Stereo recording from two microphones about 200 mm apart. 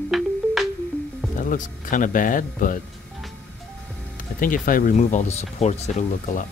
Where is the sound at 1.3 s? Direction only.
40° left (ahead or behind).